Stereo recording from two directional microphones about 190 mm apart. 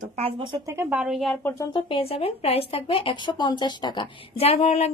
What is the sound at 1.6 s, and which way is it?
Speech, 25° left (ahead or behind).